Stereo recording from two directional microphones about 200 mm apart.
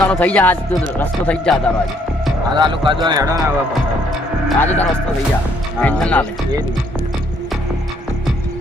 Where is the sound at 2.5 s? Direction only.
25° right (ahead or behind).